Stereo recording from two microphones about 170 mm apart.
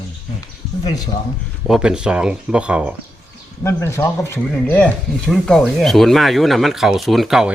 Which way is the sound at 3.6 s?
15° left (ahead or behind).